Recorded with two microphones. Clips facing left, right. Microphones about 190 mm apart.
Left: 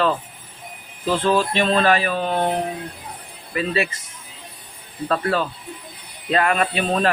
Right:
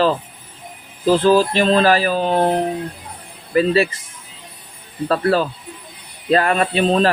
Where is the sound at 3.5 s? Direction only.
35° right (ahead or behind).